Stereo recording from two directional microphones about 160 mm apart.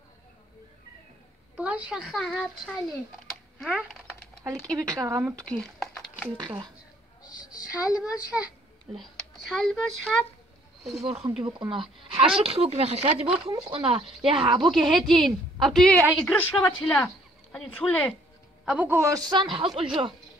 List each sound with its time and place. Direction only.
1.6 s speech: 10° right (ahead or behind)
3.3 s typing: centre (ahead or behind)
4.7 s a woman's voice: 20° right (ahead or behind)
5.6 s a sound: centre (ahead or behind)
7.7 s speech: 5° right (ahead or behind)
9.5 s speech: centre (ahead or behind)
11.0 s speech: 35° right (ahead or behind)
14.7 s speech: centre (ahead or behind)
18.7 s a woman's voice: 10° right (ahead or behind); by 20.2 s 35° right (ahead or behind)